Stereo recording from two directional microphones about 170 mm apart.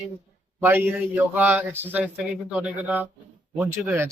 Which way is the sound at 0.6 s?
10° right (ahead or behind).